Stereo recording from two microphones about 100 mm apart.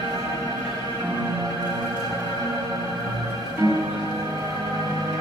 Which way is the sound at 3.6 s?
40° right (ahead or behind).